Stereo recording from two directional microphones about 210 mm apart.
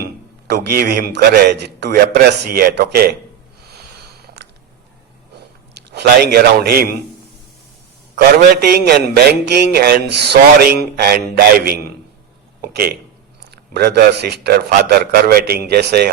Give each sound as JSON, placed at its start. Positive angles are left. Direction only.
{"t": 0.4, "sound": "a man's voice", "side_deg": -50}
{"t": 5.7, "sound": "a man's voice", "side_deg": -50}
{"t": 8.1, "sound": "a man's voice", "side_deg": -50}